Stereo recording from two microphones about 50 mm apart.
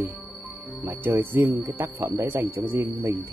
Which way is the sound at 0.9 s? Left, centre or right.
Right.